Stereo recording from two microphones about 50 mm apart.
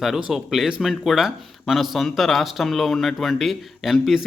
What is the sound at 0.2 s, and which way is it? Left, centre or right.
Speech, centre.